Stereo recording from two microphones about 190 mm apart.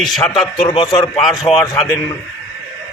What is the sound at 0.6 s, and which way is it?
Speech, 30° left (ahead or behind).